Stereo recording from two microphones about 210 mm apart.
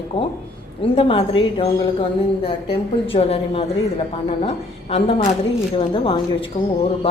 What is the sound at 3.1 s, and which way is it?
Speech, 25° left (ahead or behind).